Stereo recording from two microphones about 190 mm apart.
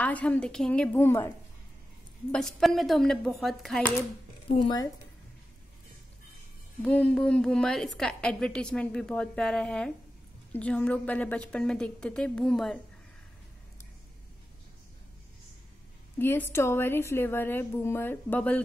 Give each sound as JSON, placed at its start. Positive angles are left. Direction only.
{"t": 0.0, "sound": "a woman's voice", "side_deg": 10}
{"t": 2.3, "sound": "a woman's voice", "side_deg": 0}
{"t": 4.5, "sound": "speech", "side_deg": 25}
{"t": 6.8, "sound": "a woman's voice", "side_deg": 5}
{"t": 16.2, "sound": "a woman's voice", "side_deg": 10}